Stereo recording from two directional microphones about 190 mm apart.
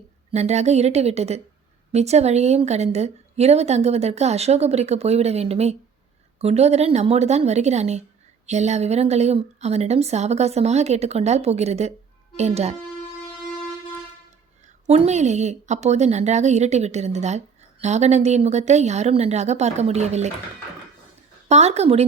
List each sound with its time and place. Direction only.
0.3 s a woman's voice: 35° right (ahead or behind)
14.8 s a woman's voice: 35° right (ahead or behind)
21.5 s a woman's voice: 35° right (ahead or behind)